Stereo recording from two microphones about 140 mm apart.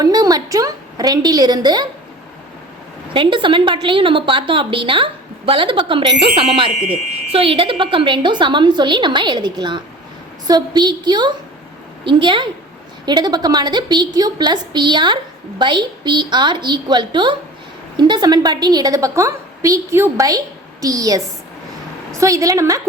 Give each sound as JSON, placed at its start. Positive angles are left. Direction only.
{"t": 0.0, "sound": "a woman's voice", "side_deg": -30}
{"t": 3.1, "sound": "a woman's voice", "side_deg": -35}